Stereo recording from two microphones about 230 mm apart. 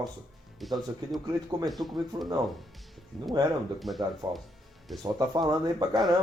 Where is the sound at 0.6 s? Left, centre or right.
Centre.